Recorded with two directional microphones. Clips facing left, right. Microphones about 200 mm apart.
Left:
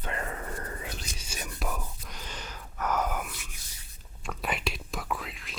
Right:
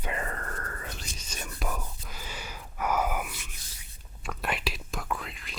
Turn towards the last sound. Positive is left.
turn(degrees=0)  # may be behind; listen again after turning